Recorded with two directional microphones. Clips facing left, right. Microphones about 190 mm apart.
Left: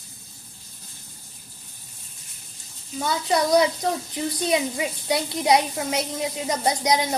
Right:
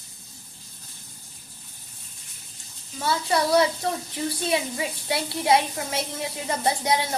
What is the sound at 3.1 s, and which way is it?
Speech, 20° left (ahead or behind).